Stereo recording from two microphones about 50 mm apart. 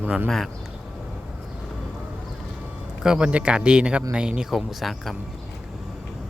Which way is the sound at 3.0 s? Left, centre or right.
Centre.